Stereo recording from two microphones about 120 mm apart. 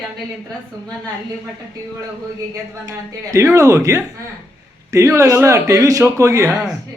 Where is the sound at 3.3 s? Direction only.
25° right (ahead or behind).